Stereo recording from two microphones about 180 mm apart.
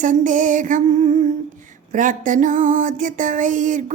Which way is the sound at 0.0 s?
45° right (ahead or behind).